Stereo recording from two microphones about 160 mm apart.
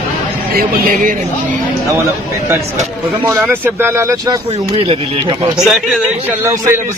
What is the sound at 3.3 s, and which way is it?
Speech, 15° right (ahead or behind).